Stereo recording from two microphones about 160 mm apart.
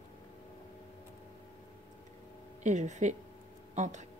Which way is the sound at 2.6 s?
50° right (ahead or behind).